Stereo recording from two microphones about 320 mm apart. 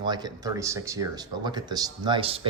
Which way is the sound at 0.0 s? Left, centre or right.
Centre.